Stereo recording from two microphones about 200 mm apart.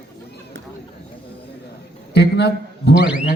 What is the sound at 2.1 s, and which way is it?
Speech, 55° left (ahead or behind).